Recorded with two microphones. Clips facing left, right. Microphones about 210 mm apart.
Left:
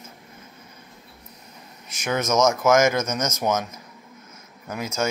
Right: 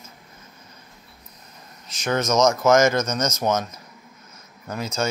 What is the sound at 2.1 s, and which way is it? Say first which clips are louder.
Speech: right 1 dB; 5° left (ahead or behind).